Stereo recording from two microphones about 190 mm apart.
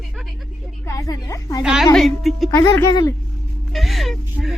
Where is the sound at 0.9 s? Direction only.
15° left (ahead or behind).